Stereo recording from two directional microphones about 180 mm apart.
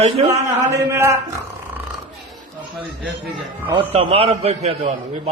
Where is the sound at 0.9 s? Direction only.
15° right (ahead or behind).